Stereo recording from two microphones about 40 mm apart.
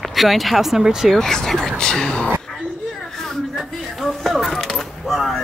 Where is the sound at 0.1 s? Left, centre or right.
Centre.